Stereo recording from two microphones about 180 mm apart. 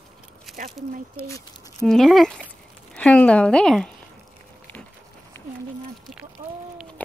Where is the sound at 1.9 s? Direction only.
Centre (ahead or behind).